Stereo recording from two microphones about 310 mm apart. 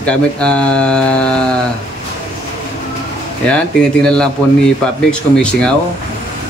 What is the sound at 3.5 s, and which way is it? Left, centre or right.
Speech, centre.